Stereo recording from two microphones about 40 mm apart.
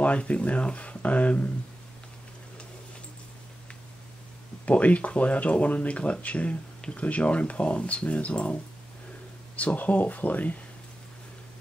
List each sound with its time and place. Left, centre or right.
0.0 s speech: left
4.6 s speech: left
9.6 s speech: left